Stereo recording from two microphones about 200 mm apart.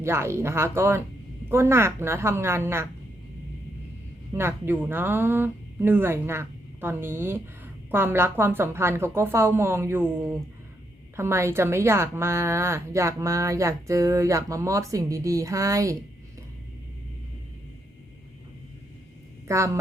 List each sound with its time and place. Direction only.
0.0 s speech: 10° right (ahead or behind)
4.4 s speech: 10° right (ahead or behind)
11.2 s speech: 10° right (ahead or behind)
19.5 s speech: 15° right (ahead or behind)